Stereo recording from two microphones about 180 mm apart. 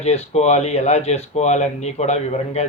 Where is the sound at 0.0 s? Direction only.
35° left (ahead or behind).